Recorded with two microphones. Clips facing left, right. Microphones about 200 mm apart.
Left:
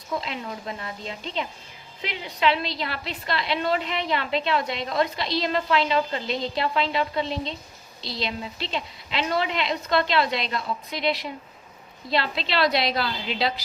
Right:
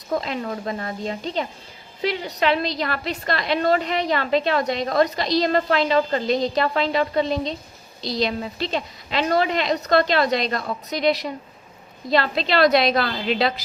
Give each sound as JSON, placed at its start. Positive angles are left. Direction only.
{"t": 0.1, "sound": "a woman's voice", "side_deg": -45}